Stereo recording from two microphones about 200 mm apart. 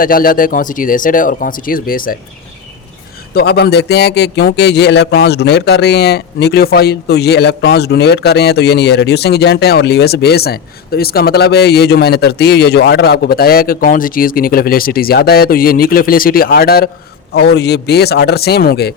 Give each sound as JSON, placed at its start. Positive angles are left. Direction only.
{"t": 0.0, "sound": "a man's voice", "side_deg": 45}
{"t": 3.3, "sound": "a man's voice", "side_deg": 55}